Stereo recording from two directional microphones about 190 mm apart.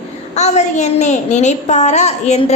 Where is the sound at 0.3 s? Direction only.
35° left (ahead or behind).